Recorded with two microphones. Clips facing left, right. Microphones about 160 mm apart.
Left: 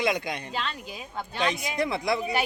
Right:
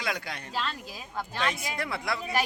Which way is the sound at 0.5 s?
Centre (ahead or behind).